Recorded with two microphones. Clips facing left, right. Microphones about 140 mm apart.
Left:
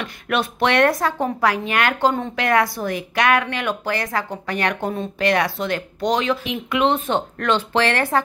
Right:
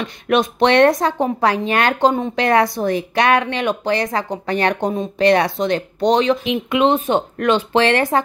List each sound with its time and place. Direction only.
0.0 s speech: 20° right (ahead or behind)